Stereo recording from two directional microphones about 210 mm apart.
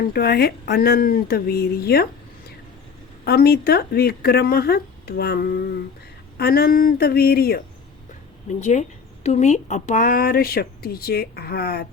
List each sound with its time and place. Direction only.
0.0 s speech: 45° left (ahead or behind)
3.2 s speech: 45° left (ahead or behind)
8.5 s speech: 35° left (ahead or behind)